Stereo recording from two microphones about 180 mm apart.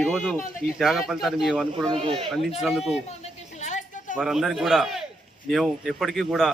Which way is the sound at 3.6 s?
40° left (ahead or behind).